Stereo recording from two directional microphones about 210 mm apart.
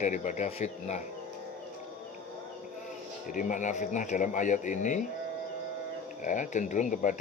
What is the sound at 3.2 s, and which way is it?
Speech, 35° left (ahead or behind).